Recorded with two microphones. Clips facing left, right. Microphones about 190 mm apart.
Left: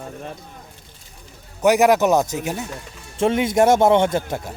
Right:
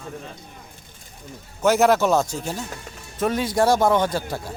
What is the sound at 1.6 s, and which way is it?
Speech, 15° left (ahead or behind).